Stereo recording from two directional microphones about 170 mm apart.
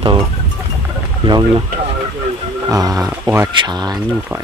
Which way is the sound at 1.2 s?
25° right (ahead or behind).